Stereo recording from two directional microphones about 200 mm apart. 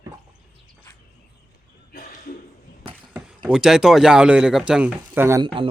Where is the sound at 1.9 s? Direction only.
45° left (ahead or behind).